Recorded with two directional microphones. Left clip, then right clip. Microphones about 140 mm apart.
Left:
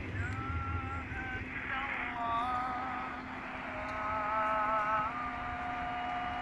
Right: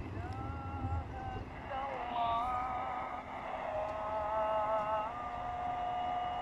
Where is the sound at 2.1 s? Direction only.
25° right (ahead or behind).